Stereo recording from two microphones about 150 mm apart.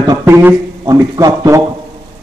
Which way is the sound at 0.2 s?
15° right (ahead or behind).